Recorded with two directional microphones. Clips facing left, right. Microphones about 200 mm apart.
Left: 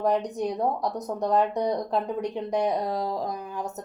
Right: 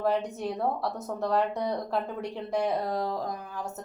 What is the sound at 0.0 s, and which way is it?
Speech, 15° left (ahead or behind).